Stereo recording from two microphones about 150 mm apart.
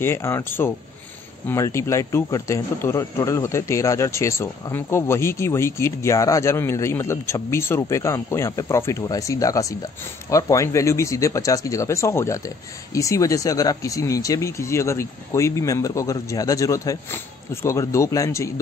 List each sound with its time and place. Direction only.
0.0 s speech: 15° left (ahead or behind)